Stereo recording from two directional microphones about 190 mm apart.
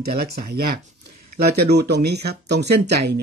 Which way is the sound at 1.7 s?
60° right (ahead or behind).